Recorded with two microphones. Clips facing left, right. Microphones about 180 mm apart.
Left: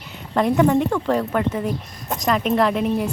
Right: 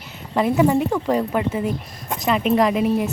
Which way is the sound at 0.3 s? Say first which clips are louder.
Even; 5° right (ahead or behind).